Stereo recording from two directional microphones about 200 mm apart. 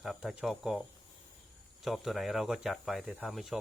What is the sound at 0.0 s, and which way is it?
Speech, centre (ahead or behind).